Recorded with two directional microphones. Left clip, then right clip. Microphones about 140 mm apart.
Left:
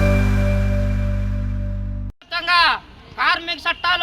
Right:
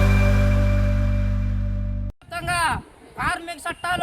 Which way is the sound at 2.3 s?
25° right (ahead or behind).